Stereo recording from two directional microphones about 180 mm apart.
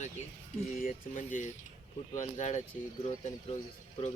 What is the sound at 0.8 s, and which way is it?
Speech, 45° left (ahead or behind).